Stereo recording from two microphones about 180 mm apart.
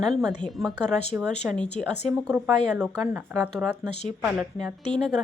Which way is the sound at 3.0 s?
10° right (ahead or behind).